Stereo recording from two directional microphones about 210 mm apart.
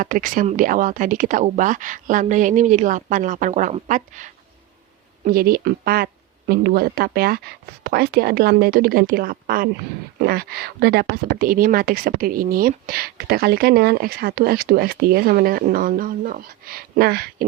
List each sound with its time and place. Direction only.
0.0 s speech: 40° right (ahead or behind)